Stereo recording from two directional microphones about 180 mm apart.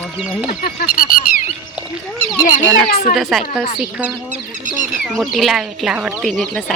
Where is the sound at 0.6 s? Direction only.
55° left (ahead or behind).